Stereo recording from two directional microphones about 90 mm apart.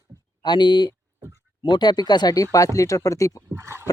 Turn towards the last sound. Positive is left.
turn(degrees=-30)  # may be behind; listen again after turning